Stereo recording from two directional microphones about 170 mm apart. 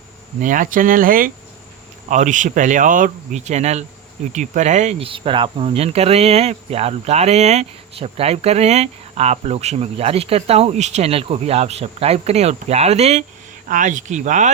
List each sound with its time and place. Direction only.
0.4 s speech: 50° right (ahead or behind)
13.7 s speech: 50° right (ahead or behind)